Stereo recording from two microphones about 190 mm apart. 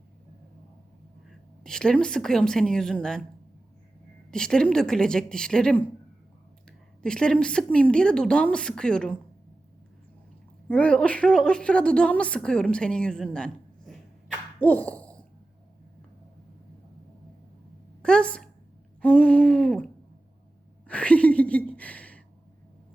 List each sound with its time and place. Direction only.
1.3 s a woman's voice: 5° left (ahead or behind)
4.3 s a woman's voice: 5° left (ahead or behind)
10.7 s a woman's voice: 5° left (ahead or behind)
14.6 s a sound: 10° left (ahead or behind)
18.0 s a woman's voice: 5° left (ahead or behind)
20.8 s a sound: 5° left (ahead or behind)